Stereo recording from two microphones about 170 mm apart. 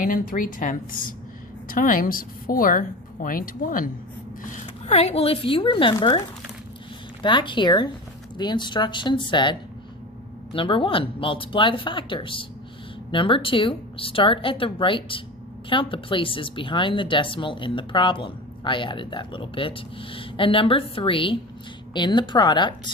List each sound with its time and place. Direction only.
0.0 s a woman's voice: 55° left (ahead or behind)
4.4 s a woman's voice: 45° left (ahead or behind); by 22.9 s 25° left (ahead or behind)